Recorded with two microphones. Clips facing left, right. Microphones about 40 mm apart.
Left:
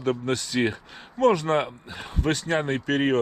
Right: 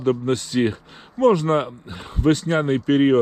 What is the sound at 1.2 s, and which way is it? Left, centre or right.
Speech, left.